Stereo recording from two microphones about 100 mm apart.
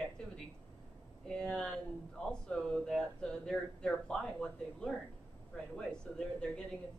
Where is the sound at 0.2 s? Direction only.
10° left (ahead or behind).